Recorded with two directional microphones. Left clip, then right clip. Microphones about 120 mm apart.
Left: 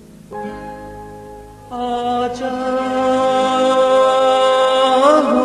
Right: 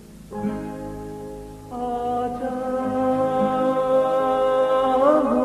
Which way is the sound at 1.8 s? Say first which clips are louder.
Left 6 dB; 35° left (ahead or behind).